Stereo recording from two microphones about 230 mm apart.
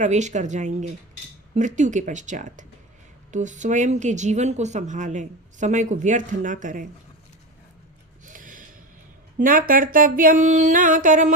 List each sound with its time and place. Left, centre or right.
0.0 s speech: right
8.2 s gasp: right
9.4 s speech: right